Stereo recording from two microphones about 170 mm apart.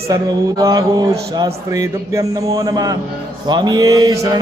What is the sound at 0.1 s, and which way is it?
Mantra, 20° right (ahead or behind).